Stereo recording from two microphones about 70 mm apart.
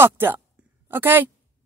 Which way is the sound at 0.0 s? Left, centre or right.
Right.